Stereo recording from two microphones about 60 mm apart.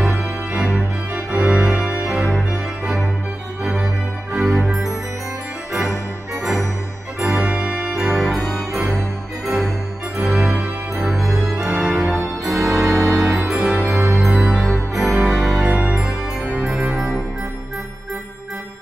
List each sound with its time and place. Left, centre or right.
0.2 s music: centre
2.0 s organ: centre
3.7 s music: centre
4.4 s music: centre
7.2 s music: centre
8.0 s music: centre
10.1 s music: centre
12.9 s music: right
13.2 s music: centre
15.8 s music: centre
16.6 s organ: centre